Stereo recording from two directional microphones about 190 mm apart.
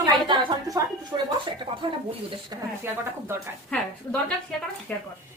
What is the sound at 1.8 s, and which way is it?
Speech, 25° right (ahead or behind).